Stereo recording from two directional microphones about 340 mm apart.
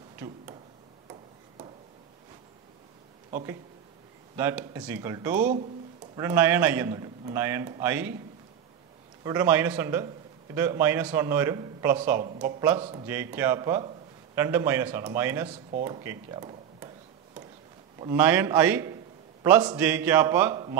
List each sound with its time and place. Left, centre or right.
0.1 s tick-tock: centre
4.4 s a man's voice: centre
5.3 s a man's voice: right
6.1 s a man's voice: centre
9.2 s a man's voice: centre
17.9 s a man's voice: centre